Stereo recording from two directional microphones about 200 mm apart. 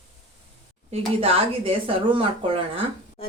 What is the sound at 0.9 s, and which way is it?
Speech, 30° right (ahead or behind).